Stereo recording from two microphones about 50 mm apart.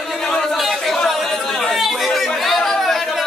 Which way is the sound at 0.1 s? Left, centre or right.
Centre.